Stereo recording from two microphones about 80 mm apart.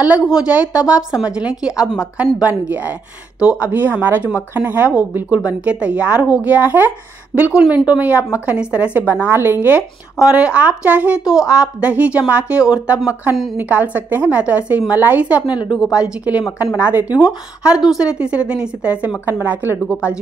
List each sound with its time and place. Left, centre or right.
0.3 s a woman's voice: centre
10.1 s a woman's voice: centre
15.4 s a woman's voice: left
15.8 s a woman's voice: centre
17.2 s a woman's voice: centre; by 19.8 s right